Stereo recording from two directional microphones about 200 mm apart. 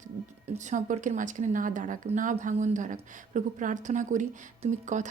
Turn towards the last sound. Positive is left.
turn(degrees=-35)  # may be behind; listen again after turning